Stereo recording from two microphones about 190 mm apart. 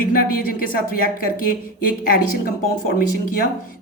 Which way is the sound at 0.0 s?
50° left (ahead or behind).